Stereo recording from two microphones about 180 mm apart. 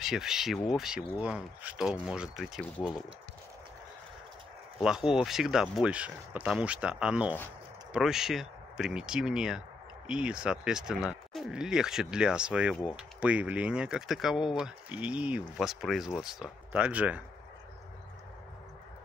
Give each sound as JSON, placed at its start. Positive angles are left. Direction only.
{"t": 0.0, "sound": "speech", "side_deg": 0}
{"t": 4.8, "sound": "speech", "side_deg": -5}